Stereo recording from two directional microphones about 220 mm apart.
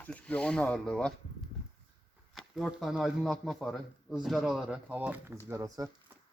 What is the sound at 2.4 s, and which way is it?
Speech, centre (ahead or behind).